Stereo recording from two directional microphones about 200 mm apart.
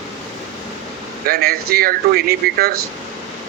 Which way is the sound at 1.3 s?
50° right (ahead or behind).